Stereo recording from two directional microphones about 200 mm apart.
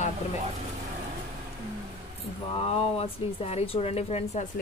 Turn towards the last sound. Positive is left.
turn(degrees=30)  # may be behind; listen again after turning